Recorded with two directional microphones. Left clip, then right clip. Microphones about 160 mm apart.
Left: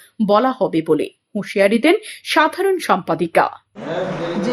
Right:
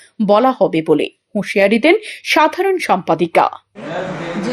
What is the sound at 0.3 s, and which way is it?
Speech, 15° right (ahead or behind).